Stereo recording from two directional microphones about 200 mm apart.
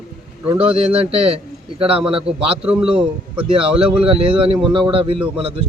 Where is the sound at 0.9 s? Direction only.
30° right (ahead or behind).